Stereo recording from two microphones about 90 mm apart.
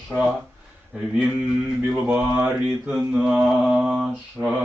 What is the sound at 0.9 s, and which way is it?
Mantra, 10° right (ahead or behind).